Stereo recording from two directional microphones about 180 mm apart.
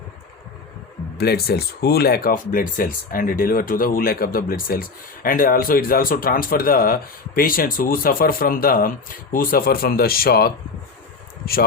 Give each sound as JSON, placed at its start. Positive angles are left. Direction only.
{"t": 1.2, "sound": "speech", "side_deg": 60}